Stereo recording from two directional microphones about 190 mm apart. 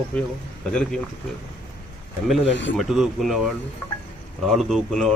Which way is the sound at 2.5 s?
70° left (ahead or behind).